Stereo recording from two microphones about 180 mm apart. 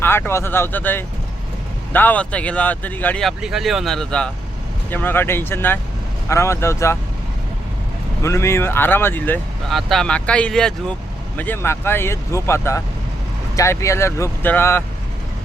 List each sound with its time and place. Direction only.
0.0 s speech: 10° left (ahead or behind)
8.2 s speech: 15° left (ahead or behind)